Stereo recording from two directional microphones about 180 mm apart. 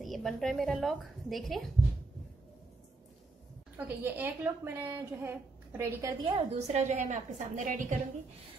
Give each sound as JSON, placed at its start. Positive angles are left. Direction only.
{"t": 0.0, "sound": "a woman's voice", "side_deg": 0}
{"t": 3.7, "sound": "a woman's voice", "side_deg": -10}
{"t": 6.2, "sound": "a woman's voice", "side_deg": -25}
{"t": 6.8, "sound": "a woman's voice", "side_deg": -40}